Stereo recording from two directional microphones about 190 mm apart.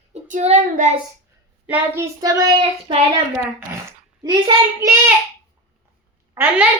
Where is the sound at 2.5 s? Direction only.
30° right (ahead or behind).